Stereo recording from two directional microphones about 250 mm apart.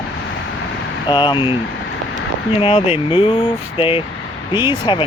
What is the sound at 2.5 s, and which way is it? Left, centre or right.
Speech, left.